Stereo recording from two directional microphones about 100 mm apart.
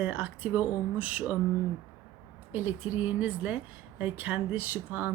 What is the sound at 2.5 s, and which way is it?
Speech, 15° right (ahead or behind).